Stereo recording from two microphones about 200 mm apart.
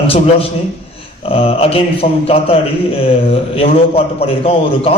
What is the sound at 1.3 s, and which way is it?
A man's voice, 30° left (ahead or behind).